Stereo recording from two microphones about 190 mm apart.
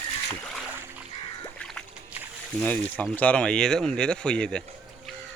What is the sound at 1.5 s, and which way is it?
Rowboat, 5° left (ahead or behind).